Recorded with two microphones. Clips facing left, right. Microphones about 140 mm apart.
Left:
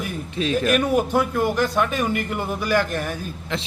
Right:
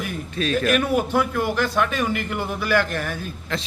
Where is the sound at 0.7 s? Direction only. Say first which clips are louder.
Left 1 dB; centre (ahead or behind).